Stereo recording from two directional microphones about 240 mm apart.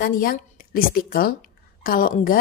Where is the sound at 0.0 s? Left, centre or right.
Left.